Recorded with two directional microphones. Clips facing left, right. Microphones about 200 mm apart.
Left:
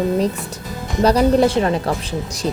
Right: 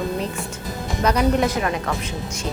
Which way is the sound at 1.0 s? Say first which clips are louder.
Left 6 dB; 35° left (ahead or behind).